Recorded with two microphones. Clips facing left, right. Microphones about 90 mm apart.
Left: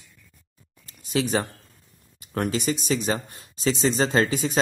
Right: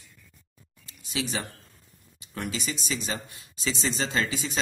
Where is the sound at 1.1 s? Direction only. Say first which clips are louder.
Left 8 dB; 45° left (ahead or behind).